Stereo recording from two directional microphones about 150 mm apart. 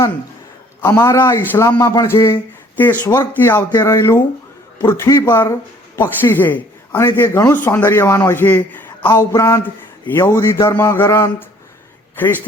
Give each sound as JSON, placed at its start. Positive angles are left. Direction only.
{"t": 0.8, "sound": "a man's voice", "side_deg": 20}
{"t": 2.3, "sound": "speech", "side_deg": 15}
{"t": 3.7, "sound": "a man's voice", "side_deg": 25}